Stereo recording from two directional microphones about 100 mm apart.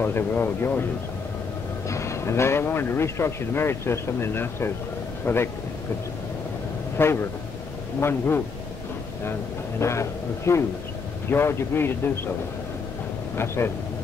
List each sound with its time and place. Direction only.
0.0 s a man's voice: 20° left (ahead or behind)
1.9 s a man's voice: 30° left (ahead or behind)
7.0 s a man's voice: 20° left (ahead or behind)
9.8 s a man's voice: 30° left (ahead or behind)
13.6 s a man's voice: 25° left (ahead or behind)